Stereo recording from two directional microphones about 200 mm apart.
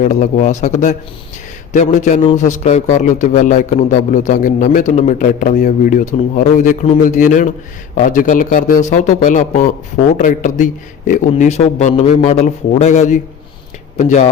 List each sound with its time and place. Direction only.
0.0 s a man's voice: 40° left (ahead or behind)